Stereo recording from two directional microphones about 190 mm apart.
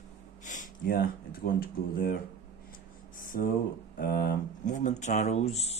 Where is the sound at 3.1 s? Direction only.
45° left (ahead or behind).